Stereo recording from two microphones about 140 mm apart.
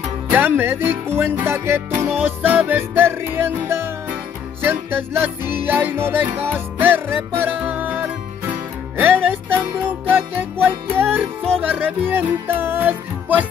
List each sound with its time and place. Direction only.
0.3 s music: 15° right (ahead or behind)